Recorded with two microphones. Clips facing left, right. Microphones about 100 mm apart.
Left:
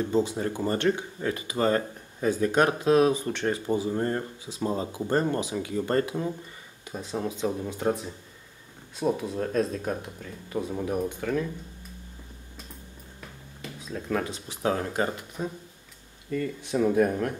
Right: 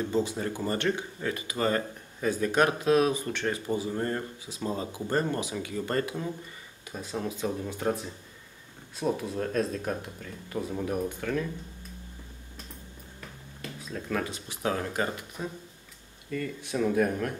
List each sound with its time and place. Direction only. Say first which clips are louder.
0.0 s speech: left 3 dB; 20° left (ahead or behind)
13.2 s a sound: even; 5° left (ahead or behind)
14.6 s speech: left 3 dB; 20° left (ahead or behind)